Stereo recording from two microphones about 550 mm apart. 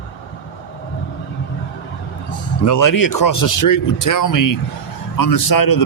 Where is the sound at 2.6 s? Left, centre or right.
Left.